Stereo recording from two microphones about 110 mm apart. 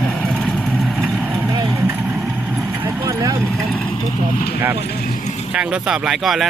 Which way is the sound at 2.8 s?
25° right (ahead or behind).